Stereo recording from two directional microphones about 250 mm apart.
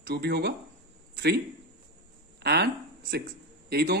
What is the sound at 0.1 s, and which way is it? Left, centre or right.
Speech, right.